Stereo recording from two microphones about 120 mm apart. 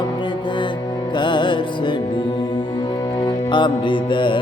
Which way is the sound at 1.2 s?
40° left (ahead or behind).